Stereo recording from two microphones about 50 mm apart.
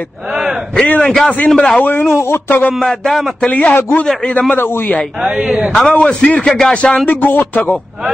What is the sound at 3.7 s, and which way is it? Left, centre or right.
Speech, left.